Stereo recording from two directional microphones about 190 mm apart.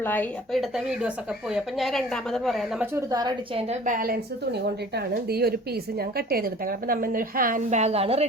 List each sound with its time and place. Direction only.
0.0 s speech: 10° left (ahead or behind)
0.9 s a woman's voice: 5° right (ahead or behind)
2.8 s a woman's voice: 15° right (ahead or behind)
3.7 s a woman's voice: 45° right (ahead or behind)